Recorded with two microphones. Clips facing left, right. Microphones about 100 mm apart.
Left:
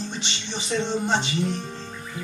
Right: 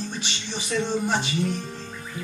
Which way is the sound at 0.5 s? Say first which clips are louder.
Even; 20° left (ahead or behind).